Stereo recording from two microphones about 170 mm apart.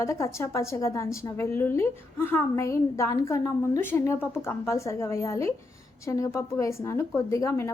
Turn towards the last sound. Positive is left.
turn(degrees=15)  # may be behind; listen again after turning